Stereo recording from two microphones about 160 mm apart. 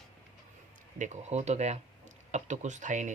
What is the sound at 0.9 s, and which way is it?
Speech, 50° right (ahead or behind).